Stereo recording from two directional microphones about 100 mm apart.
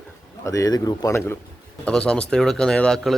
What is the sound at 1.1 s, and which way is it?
Speech, 25° left (ahead or behind).